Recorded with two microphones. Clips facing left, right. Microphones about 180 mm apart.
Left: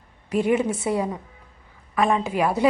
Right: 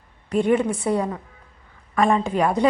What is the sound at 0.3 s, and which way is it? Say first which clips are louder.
A woman's voice: right 2 dB; 5° left (ahead or behind).